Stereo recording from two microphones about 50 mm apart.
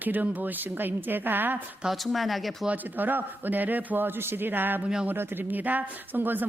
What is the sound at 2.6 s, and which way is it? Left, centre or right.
A woman's voice, right.